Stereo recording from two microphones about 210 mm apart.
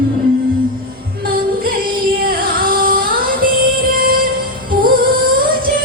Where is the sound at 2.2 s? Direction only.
45° right (ahead or behind).